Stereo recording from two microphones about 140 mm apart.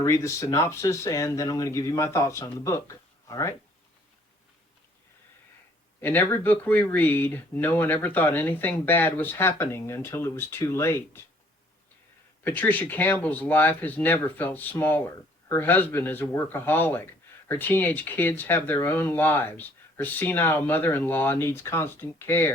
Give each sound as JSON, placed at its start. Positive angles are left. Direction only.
{"t": 0.0, "sound": "speech", "side_deg": 20}
{"t": 6.0, "sound": "speech", "side_deg": 15}
{"t": 12.5, "sound": "speech", "side_deg": 10}